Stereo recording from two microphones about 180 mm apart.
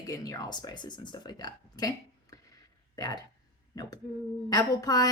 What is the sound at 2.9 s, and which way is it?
Speech, 20° left (ahead or behind).